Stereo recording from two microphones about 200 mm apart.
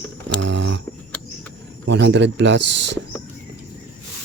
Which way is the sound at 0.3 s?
65° right (ahead or behind).